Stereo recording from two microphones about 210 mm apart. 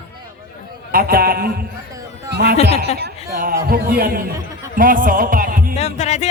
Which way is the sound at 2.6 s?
55° right (ahead or behind).